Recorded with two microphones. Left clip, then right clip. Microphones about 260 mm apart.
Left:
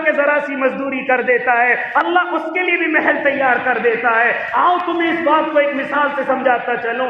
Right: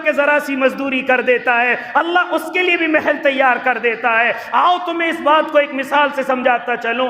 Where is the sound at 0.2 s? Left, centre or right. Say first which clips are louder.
Right 1 dB; right.